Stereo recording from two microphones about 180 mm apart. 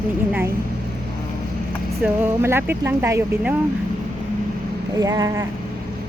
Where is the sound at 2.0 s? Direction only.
10° right (ahead or behind).